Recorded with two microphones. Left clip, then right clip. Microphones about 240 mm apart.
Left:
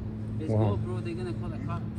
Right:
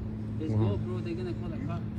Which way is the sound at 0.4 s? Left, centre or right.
Left.